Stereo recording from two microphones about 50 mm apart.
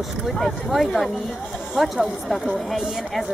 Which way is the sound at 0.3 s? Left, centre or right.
Centre.